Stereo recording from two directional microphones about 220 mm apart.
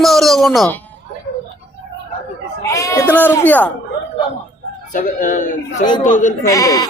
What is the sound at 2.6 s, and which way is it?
Speech, 15° left (ahead or behind).